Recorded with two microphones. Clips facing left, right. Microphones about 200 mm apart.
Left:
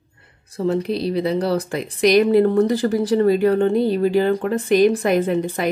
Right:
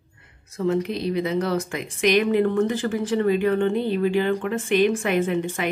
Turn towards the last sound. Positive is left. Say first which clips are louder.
# left 3 dB
turn(degrees=35)  # may be behind; listen again after turning